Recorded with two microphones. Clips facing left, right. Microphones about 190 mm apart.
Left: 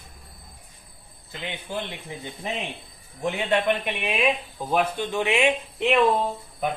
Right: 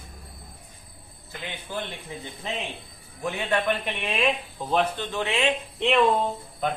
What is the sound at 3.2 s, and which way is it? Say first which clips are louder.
A man's voice: left 2 dB; 20° left (ahead or behind).